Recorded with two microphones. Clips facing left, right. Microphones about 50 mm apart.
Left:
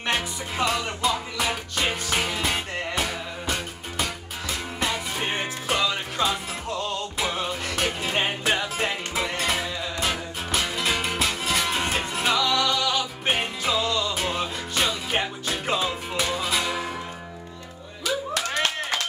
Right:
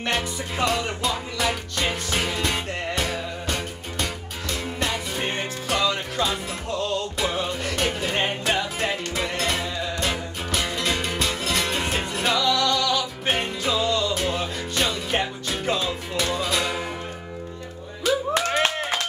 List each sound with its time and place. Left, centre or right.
0.0 s music: centre
18.0 s clapping: right